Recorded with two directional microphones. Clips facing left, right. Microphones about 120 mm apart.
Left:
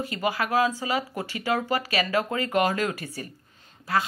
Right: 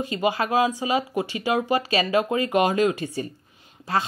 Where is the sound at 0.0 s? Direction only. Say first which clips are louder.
Right 4 dB; 20° right (ahead or behind).